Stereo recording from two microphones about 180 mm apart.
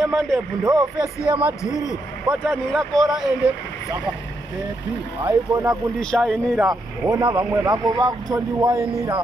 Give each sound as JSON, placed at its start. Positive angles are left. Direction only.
{"t": 0.0, "sound": "speech", "side_deg": 0}
{"t": 1.6, "sound": "a man's voice", "side_deg": 15}
{"t": 2.4, "sound": "speech", "side_deg": 0}
{"t": 5.2, "sound": "speech", "side_deg": -20}
{"t": 5.9, "sound": "speech", "side_deg": 0}
{"t": 6.6, "sound": "speech", "side_deg": -20}